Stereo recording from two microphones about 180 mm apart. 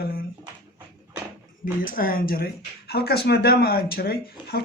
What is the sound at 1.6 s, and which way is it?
Speech, 50° left (ahead or behind).